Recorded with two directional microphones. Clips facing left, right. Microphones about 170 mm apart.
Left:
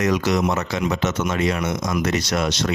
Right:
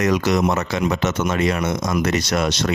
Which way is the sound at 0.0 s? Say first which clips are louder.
Right 2 dB; 50° right (ahead or behind).